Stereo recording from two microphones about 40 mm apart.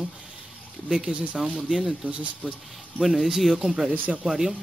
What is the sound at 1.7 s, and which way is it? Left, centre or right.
Speech, centre.